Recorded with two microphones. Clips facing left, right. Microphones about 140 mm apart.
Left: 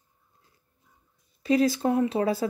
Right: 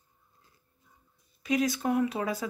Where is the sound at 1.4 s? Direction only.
30° left (ahead or behind).